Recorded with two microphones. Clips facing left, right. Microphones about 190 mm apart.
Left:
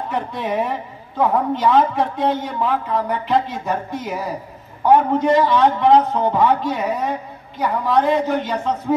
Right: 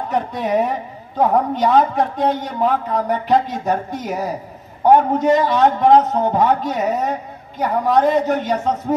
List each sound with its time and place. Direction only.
0.1 s a woman's voice: 45° right (ahead or behind)